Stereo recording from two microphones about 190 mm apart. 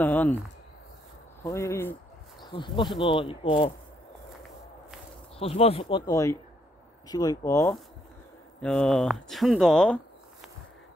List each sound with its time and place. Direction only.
0.0 s speech: 5° left (ahead or behind)
1.4 s speech: 15° left (ahead or behind)
2.4 s speech: 25° left (ahead or behind)
5.4 s speech: 30° left (ahead or behind); by 7.7 s 15° left (ahead or behind)
8.5 s speech: 5° left (ahead or behind)